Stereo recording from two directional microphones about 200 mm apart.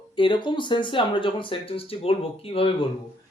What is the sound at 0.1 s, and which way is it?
Speech, 25° left (ahead or behind).